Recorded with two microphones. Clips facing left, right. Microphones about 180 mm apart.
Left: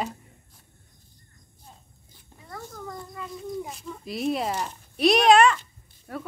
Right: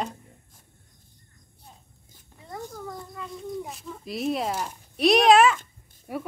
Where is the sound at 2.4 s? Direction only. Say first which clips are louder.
Right 3 dB; 15° right (ahead or behind).